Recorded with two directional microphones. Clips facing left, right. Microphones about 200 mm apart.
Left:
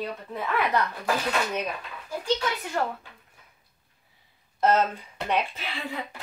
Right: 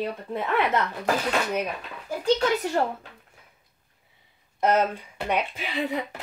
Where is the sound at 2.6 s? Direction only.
35° right (ahead or behind).